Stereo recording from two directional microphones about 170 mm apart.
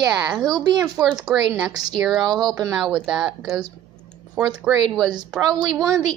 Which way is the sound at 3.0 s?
5° right (ahead or behind).